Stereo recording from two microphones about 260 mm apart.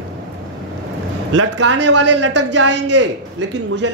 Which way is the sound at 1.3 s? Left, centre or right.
Right.